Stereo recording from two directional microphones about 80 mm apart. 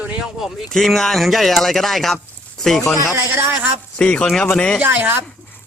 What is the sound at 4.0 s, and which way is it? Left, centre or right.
Speech, centre.